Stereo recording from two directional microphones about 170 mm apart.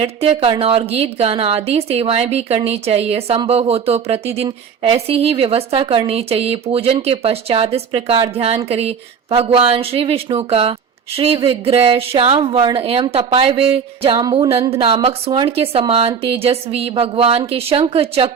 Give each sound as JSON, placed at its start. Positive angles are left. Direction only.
{"t": 0.0, "sound": "a woman's voice", "side_deg": -35}